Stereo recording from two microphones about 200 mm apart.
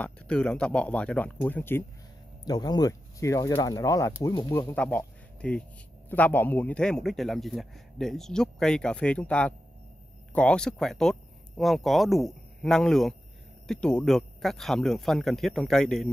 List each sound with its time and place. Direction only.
0.0 s speech: 5° left (ahead or behind)